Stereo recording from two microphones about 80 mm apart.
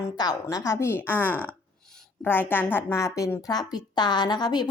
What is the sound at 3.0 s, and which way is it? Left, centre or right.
A woman's voice, left.